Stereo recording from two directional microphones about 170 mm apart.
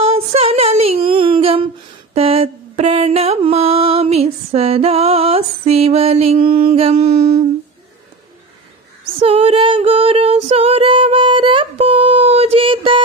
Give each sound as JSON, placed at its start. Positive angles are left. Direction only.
{"t": 0.0, "sound": "a sound", "side_deg": -35}
{"t": 2.1, "sound": "mantra", "side_deg": -35}
{"t": 9.0, "sound": "female singing", "side_deg": -35}